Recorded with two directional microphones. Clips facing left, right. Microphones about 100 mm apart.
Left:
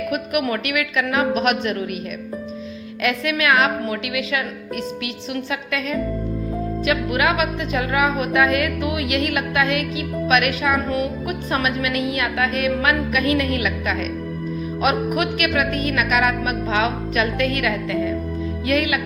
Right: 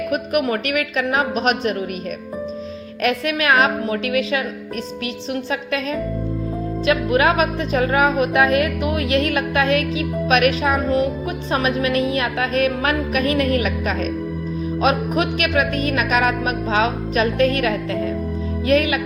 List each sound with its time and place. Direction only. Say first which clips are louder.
0.1 s a woman's voice: right 3 dB; 35° right (ahead or behind)
3.0 s a woman's voice: right 1 dB; 35° right (ahead or behind)